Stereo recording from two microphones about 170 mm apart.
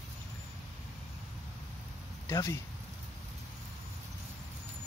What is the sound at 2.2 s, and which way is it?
Speech, 20° left (ahead or behind).